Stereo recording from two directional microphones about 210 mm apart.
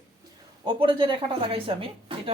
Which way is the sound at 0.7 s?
25° right (ahead or behind).